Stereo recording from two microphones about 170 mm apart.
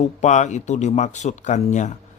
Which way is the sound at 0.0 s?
45° left (ahead or behind).